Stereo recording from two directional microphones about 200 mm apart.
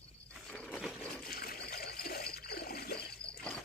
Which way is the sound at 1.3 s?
50° left (ahead or behind).